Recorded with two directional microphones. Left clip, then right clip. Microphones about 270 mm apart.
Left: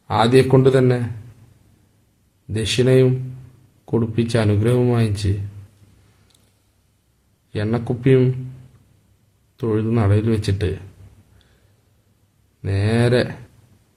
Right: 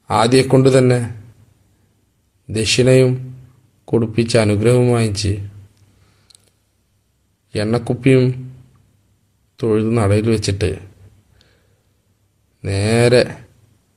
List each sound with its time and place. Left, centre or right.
0.1 s speech: centre
2.5 s speech: centre
7.5 s speech: centre
9.6 s speech: centre
12.6 s speech: centre